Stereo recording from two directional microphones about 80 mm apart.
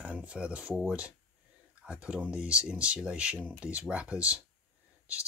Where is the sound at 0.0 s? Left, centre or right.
Centre.